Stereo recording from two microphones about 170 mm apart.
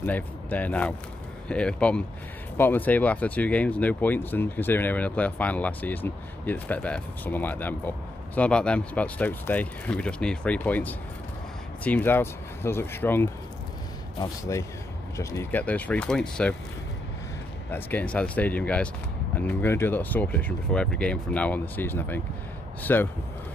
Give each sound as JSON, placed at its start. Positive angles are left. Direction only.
{"t": 0.0, "sound": "speech", "side_deg": 10}
{"t": 14.5, "sound": "speech", "side_deg": 20}
{"t": 17.6, "sound": "speech", "side_deg": 10}